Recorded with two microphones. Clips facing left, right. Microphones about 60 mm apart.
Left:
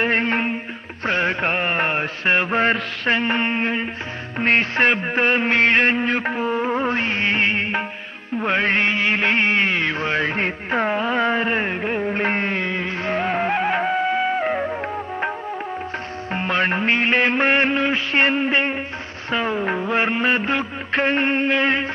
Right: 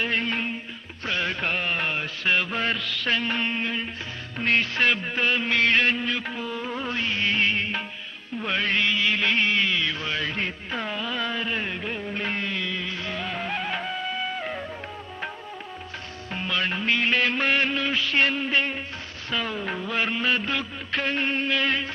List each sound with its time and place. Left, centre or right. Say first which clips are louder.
0.0 s music: left 7 dB; left
1.0 s mantra: left 7 dB; left
4.4 s music: left 5 dB; left
16.3 s music: left 7 dB; left